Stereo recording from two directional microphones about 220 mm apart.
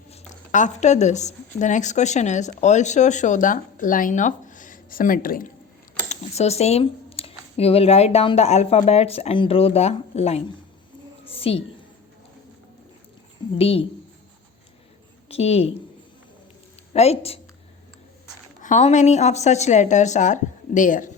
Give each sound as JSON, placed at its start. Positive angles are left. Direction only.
{"t": 0.1, "sound": "speech", "side_deg": 35}
{"t": 6.1, "sound": "speech", "side_deg": 30}
{"t": 11.3, "sound": "a sound", "side_deg": 25}
{"t": 13.6, "sound": "speech", "side_deg": 25}
{"t": 15.3, "sound": "a woman's voice", "side_deg": 30}
{"t": 16.9, "sound": "speech", "side_deg": 30}
{"t": 18.6, "sound": "a woman's voice", "side_deg": 30}